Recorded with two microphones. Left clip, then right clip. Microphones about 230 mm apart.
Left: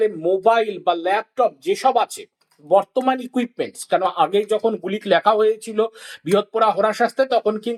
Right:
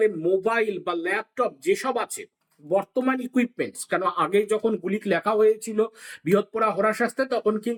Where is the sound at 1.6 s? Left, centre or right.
Centre.